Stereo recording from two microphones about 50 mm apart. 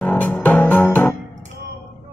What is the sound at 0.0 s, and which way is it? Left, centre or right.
Music, left.